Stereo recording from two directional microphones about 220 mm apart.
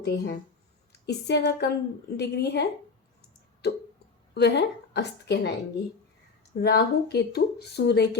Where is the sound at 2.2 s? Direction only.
50° left (ahead or behind).